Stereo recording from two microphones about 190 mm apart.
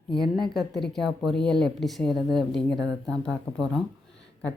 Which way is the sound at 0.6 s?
Centre (ahead or behind).